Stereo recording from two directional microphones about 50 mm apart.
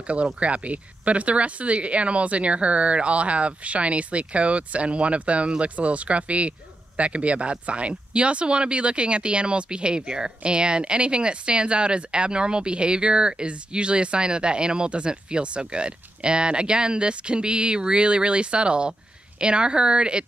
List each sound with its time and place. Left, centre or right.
0.0 s speech: right